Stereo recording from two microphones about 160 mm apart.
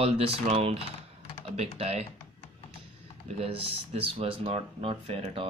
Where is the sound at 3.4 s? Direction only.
35° right (ahead or behind).